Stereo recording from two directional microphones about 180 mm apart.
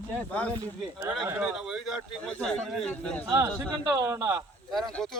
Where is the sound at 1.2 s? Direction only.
10° right (ahead or behind).